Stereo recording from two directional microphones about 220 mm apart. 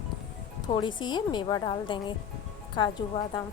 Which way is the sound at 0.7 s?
20° left (ahead or behind).